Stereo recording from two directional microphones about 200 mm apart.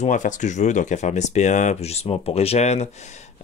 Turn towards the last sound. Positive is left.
turn(degrees=35)  # may be behind; listen again after turning